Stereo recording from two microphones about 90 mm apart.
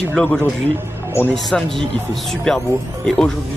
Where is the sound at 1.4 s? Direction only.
5° left (ahead or behind).